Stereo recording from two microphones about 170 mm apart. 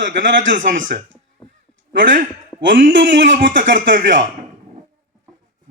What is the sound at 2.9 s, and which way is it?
Speech, 90° right.